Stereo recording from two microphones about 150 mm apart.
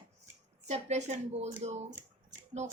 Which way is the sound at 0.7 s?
50° right (ahead or behind).